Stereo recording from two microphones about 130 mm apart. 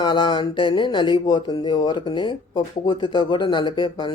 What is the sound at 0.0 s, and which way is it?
Speech, 35° left (ahead or behind).